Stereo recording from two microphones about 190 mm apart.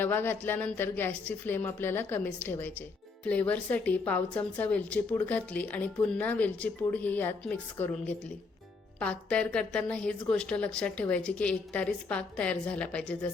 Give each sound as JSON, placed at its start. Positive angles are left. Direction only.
{"t": 0.0, "sound": "a woman's voice", "side_deg": 10}